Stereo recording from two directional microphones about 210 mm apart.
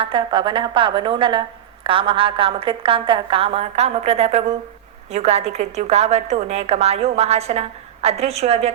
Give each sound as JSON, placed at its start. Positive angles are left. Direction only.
{"t": 0.0, "sound": "a woman's voice", "side_deg": -25}